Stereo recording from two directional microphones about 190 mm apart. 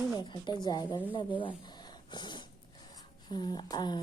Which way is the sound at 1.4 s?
25° left (ahead or behind).